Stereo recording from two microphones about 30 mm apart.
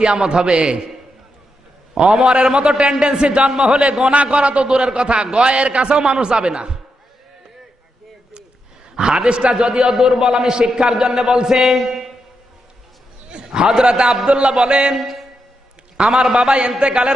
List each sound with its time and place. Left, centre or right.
0.0 s a man's voice: right
2.0 s a man's voice: right
9.0 s a man's voice: right
9.9 s a man's voice: centre
10.5 s a man's voice: right
10.8 s a man's voice: centre
11.9 s a sound: centre
13.3 s a man's voice: right
14.9 s a man's voice: centre
16.2 s a man's voice: right